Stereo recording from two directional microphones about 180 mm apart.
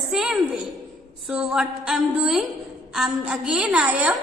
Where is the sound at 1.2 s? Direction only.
5° right (ahead or behind).